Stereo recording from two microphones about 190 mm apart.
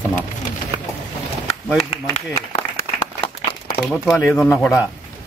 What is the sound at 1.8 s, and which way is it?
Speech, 35° left (ahead or behind).